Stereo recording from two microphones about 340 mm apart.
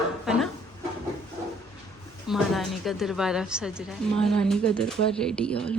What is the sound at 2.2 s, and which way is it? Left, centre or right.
A woman's voice, centre.